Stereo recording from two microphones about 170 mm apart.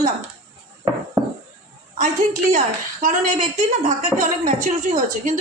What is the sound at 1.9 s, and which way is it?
A woman's voice, 50° right (ahead or behind).